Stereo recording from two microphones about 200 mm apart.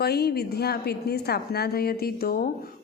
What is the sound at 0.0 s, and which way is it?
Speech, 50° left (ahead or behind).